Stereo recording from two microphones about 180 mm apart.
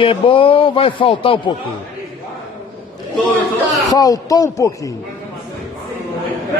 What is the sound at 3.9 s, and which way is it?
Speech, 20° left (ahead or behind).